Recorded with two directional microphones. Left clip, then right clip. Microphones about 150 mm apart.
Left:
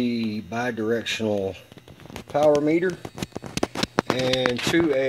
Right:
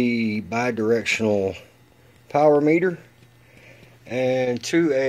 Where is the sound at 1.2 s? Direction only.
25° right (ahead or behind).